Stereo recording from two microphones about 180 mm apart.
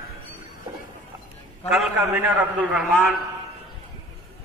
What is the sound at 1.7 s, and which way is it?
A man's voice, centre (ahead or behind).